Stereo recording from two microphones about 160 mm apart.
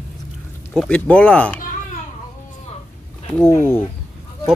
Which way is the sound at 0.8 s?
5° left (ahead or behind).